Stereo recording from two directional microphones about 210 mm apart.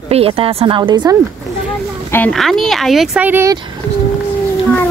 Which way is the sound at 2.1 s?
5° left (ahead or behind).